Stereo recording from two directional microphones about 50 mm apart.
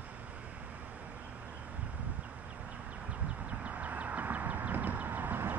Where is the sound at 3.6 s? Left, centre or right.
Right.